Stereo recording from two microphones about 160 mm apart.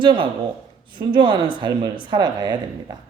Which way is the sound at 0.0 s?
30° right (ahead or behind).